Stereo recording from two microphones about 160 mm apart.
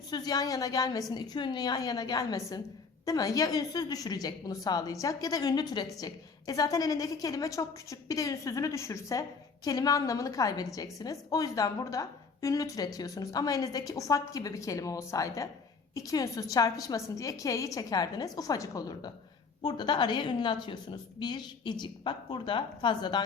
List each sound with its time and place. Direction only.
0.1 s a woman's voice: 25° left (ahead or behind)